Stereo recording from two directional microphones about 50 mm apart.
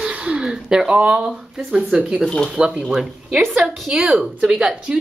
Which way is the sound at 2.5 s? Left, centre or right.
Centre.